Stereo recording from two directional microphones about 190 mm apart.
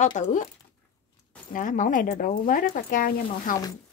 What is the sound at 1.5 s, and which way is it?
Speech, 40° left (ahead or behind).